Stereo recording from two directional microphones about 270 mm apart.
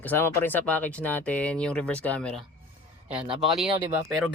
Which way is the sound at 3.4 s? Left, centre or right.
Centre.